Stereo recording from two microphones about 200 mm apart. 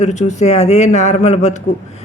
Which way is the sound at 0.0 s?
35° left (ahead or behind).